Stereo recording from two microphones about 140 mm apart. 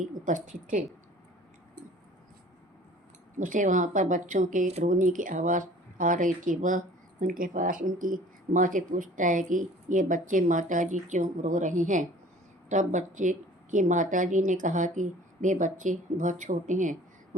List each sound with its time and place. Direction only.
0.0 s speech: 70° right (ahead or behind)
3.3 s a woman's voice: 65° right (ahead or behind)